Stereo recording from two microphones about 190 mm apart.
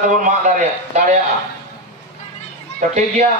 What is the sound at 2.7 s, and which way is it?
Speech, 40° right (ahead or behind).